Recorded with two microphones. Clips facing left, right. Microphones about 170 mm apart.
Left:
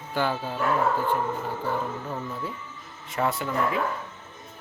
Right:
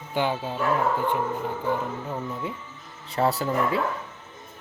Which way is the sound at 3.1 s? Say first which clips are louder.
Right 3 dB; 35° right (ahead or behind).